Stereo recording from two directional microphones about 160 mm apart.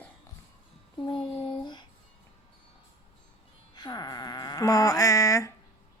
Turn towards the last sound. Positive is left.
turn(degrees=20)  # may be behind; listen again after turning